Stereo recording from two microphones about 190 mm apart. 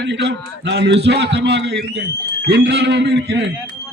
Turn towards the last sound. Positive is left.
turn(degrees=-60)  # may be behind; listen again after turning